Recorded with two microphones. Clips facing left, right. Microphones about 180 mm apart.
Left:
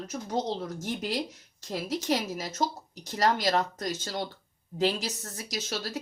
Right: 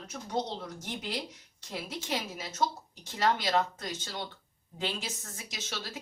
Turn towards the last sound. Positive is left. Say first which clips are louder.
# left 7 dB
turn(degrees=40)  # may be behind; listen again after turning